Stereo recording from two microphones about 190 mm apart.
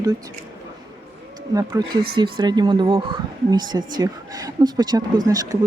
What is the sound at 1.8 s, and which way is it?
A woman's voice, 20° right (ahead or behind).